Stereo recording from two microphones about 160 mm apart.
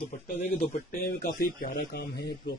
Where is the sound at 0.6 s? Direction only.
60° left (ahead or behind); by 2.5 s 85° left.